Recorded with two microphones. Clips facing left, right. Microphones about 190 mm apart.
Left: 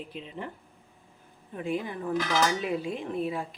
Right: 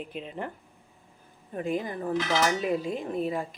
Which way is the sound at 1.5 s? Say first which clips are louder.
Right 2 dB; 40° right (ahead or behind).